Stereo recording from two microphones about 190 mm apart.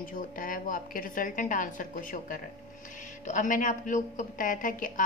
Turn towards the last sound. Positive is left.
turn(degrees=45)  # may be behind; listen again after turning